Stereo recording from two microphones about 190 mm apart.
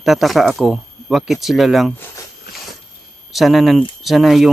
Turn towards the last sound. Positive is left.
turn(degrees=0)  # may be behind; listen again after turning